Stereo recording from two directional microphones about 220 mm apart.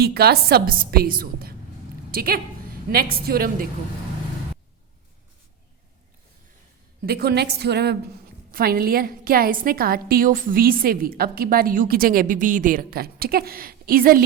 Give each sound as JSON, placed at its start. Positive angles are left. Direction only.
{"t": 0.0, "sound": "a woman's voice", "side_deg": -45}
{"t": 7.0, "sound": "a woman's voice", "side_deg": -45}